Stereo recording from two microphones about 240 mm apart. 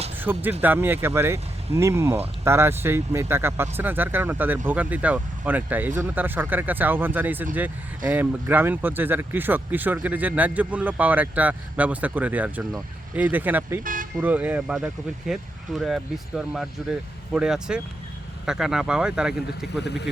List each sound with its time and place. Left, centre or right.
0.2 s speech: centre
13.8 s vehicle: right
14.2 s speech: centre
19.8 s speech: left